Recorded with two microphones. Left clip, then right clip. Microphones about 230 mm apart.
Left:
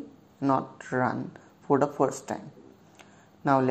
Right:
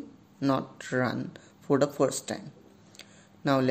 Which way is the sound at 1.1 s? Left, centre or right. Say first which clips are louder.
Left 2 dB; right.